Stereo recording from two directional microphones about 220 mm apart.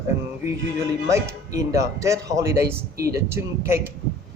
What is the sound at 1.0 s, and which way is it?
Speech, 15° right (ahead or behind).